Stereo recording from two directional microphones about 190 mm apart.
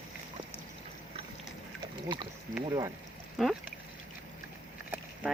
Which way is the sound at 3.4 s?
Centre (ahead or behind).